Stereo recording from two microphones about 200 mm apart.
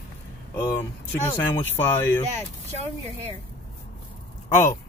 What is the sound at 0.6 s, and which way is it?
Speech, 10° left (ahead or behind).